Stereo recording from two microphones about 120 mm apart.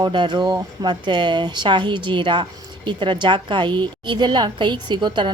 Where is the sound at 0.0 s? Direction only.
40° right (ahead or behind).